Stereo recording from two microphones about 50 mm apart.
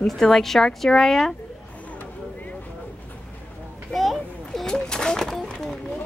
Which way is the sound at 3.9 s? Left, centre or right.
Centre.